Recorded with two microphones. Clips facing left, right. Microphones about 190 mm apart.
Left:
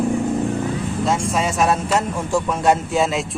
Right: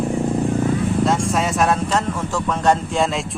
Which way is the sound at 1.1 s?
Centre (ahead or behind).